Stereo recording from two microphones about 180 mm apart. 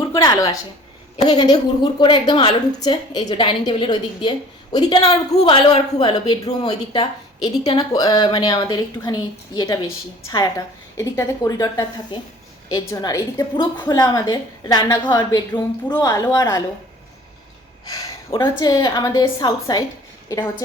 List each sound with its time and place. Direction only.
0.1 s a woman's voice: 25° left (ahead or behind)
18.6 s a woman's voice: 20° left (ahead or behind)